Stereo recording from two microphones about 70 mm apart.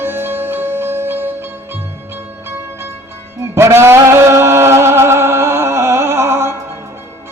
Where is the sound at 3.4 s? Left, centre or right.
Right.